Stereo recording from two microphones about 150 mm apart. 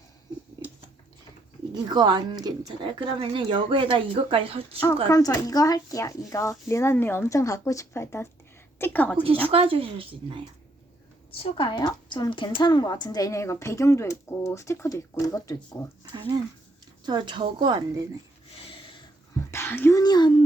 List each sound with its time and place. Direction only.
1.7 s speech: 30° right (ahead or behind)
5.0 s a woman's voice: 20° left (ahead or behind)
9.5 s speech: 35° right (ahead or behind)
11.3 s a woman's voice: 35° left (ahead or behind)
17.1 s speech: 30° right (ahead or behind)
18.7 s a sound: 35° left (ahead or behind)
19.5 s a sound: 15° left (ahead or behind)
20.0 s a woman's voice: 30° left (ahead or behind)